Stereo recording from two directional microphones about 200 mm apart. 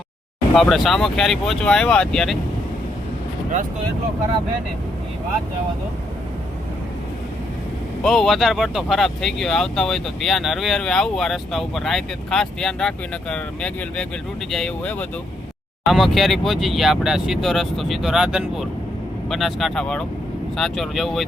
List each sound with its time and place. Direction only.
0.5 s speech: centre (ahead or behind)
8.0 s speech: centre (ahead or behind)